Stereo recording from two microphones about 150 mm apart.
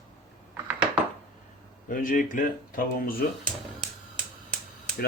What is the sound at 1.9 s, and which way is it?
Speech, 65° left (ahead or behind).